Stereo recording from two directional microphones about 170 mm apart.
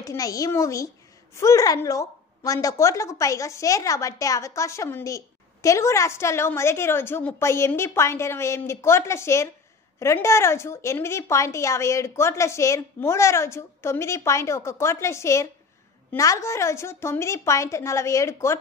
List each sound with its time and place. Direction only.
0.0 s a child's voice: 20° left (ahead or behind)